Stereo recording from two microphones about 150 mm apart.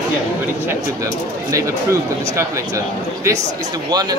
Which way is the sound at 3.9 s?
25° right (ahead or behind).